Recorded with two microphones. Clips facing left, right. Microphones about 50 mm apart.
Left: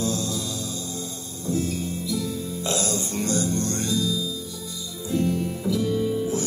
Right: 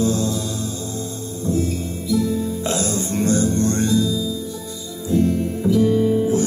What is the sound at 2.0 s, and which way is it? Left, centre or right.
Music, right.